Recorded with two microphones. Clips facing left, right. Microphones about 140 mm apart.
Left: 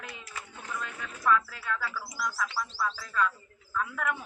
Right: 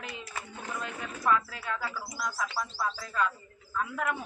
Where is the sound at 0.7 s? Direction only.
25° right (ahead or behind).